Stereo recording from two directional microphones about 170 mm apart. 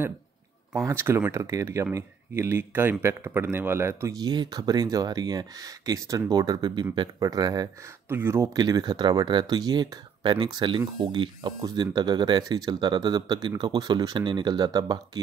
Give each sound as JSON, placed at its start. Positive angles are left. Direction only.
{"t": 0.7, "sound": "speech", "side_deg": -15}